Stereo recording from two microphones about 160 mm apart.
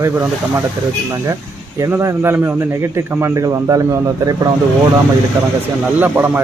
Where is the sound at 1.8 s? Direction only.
15° right (ahead or behind).